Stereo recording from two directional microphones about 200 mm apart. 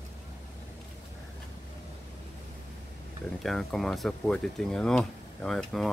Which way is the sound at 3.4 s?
Centre (ahead or behind).